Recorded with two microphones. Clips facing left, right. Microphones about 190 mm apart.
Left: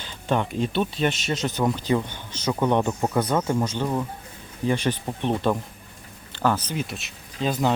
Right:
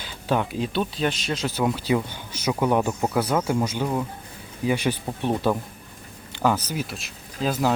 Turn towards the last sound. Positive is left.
turn(degrees=-5)  # may be behind; listen again after turning